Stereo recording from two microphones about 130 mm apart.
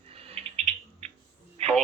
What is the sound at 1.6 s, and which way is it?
Radio, 50° right (ahead or behind).